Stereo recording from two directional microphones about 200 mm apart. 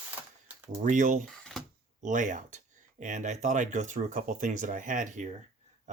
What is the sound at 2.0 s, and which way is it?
Speech, 40° right (ahead or behind).